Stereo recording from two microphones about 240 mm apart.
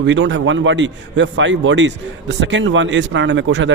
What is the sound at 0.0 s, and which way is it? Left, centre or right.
A man's voice, right.